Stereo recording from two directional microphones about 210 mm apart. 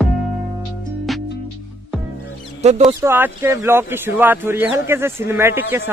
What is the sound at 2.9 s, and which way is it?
Speech, 10° right (ahead or behind).